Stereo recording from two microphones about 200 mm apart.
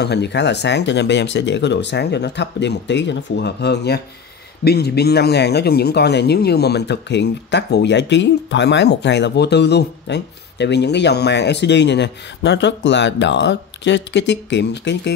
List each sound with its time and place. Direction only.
0.0 s speech: 55° left (ahead or behind)